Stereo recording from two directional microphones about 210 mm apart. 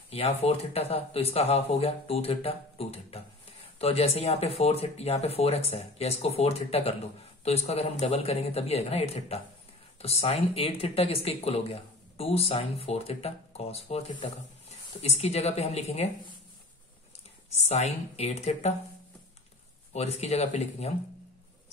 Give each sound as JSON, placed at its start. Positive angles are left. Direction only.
{"t": 0.4, "sound": "speech", "side_deg": 30}
{"t": 17.5, "sound": "speech", "side_deg": 30}
{"t": 19.9, "sound": "speech", "side_deg": 30}